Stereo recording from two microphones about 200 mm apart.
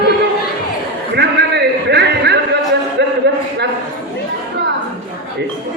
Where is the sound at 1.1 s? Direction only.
55° right (ahead or behind).